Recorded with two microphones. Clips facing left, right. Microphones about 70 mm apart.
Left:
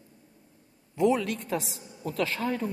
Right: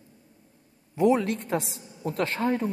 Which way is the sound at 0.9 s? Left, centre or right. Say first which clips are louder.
Right 2 dB; right.